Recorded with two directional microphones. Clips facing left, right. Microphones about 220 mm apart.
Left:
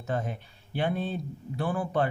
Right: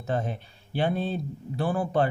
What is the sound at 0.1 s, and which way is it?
Speech, 30° right (ahead or behind).